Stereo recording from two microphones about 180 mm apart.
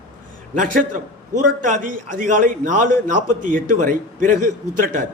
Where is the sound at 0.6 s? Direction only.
50° right (ahead or behind).